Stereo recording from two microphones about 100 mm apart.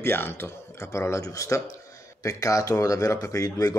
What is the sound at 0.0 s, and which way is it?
Speech, 20° left (ahead or behind).